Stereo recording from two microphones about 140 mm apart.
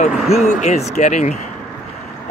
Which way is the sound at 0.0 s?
55° left (ahead or behind).